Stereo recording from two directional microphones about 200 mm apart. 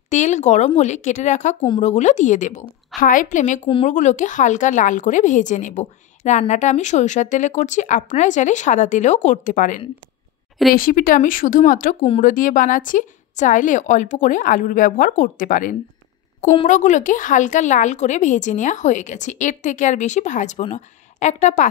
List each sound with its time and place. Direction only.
0.1 s a woman's voice: 35° left (ahead or behind)
3.6 s speech: 25° left (ahead or behind)
3.9 s a woman's voice: 35° left (ahead or behind)